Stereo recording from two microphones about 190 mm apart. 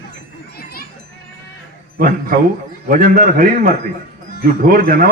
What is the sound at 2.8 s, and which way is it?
A man's voice, 50° right (ahead or behind).